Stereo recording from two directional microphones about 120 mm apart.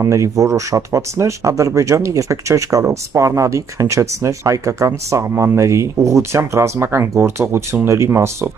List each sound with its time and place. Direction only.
0.0 s speech: 25° right (ahead or behind)